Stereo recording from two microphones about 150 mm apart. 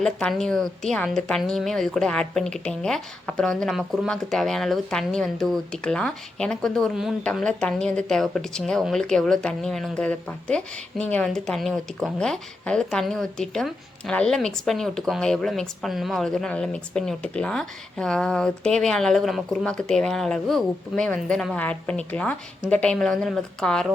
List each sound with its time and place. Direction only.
0.0 s speech: 5° left (ahead or behind)